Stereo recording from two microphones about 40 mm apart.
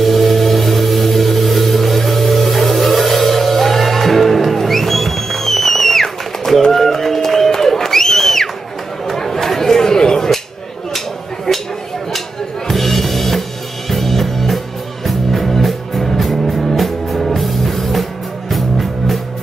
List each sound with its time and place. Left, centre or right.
0.0 s music: centre
9.0 s chatter: centre
11.5 s a sound: left
12.6 s music: centre